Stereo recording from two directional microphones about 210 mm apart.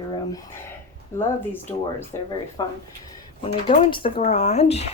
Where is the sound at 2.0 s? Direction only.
15° left (ahead or behind).